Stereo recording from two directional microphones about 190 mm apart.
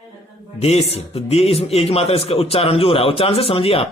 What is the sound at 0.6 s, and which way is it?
A man's voice, 30° left (ahead or behind).